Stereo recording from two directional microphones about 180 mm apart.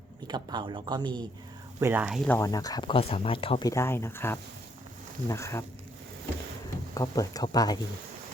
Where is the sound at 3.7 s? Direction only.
15° left (ahead or behind).